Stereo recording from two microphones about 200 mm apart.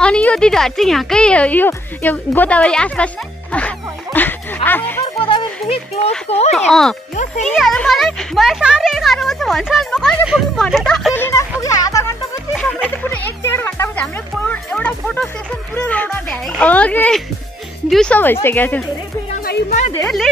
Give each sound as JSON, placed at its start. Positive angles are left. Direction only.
{"t": 0.0, "sound": "a child's voice", "side_deg": 5}
{"t": 3.5, "sound": "zipper", "side_deg": 10}
{"t": 4.6, "sound": "music", "side_deg": 10}
{"t": 5.2, "sound": "music", "side_deg": 25}
{"t": 6.5, "sound": "a child's voice", "side_deg": 0}
{"t": 11.1, "sound": "speech", "side_deg": 10}
{"t": 11.6, "sound": "music", "side_deg": 15}
{"t": 12.5, "sound": "music", "side_deg": -5}
{"t": 13.1, "sound": "music", "side_deg": 10}
{"t": 14.5, "sound": "speech", "side_deg": 10}
{"t": 19.9, "sound": "a child's voice", "side_deg": 5}